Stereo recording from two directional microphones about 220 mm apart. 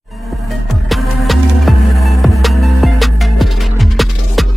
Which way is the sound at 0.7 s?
Centre (ahead or behind).